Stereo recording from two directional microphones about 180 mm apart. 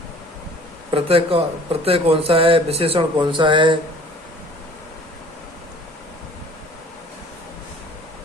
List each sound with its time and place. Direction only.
0.9 s speech: 30° right (ahead or behind)